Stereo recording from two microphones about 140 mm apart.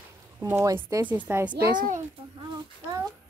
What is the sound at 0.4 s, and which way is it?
Speech, 15° right (ahead or behind).